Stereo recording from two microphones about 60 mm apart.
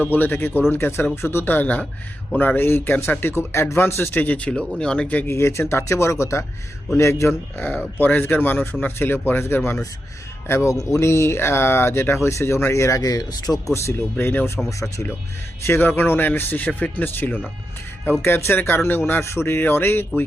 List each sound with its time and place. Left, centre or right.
0.0 s speech: left
4.1 s speech: left
5.2 s speech: left
7.5 s speech: left
13.0 s speech: left
13.8 s speech: left
15.6 s speech: left
18.2 s speech: left
19.2 s speech: left